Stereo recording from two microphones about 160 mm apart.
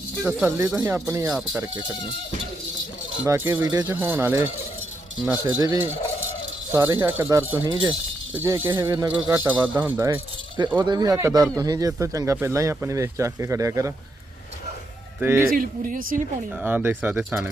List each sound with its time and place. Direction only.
0.2 s speech: 10° right (ahead or behind)
3.2 s speech: 15° right (ahead or behind)
5.5 s speech: 25° right (ahead or behind)
10.8 s speech: 25° right (ahead or behind)
15.2 s speech: 15° right (ahead or behind)
15.5 s speech: 60° right (ahead or behind)
16.6 s speech: 10° right (ahead or behind)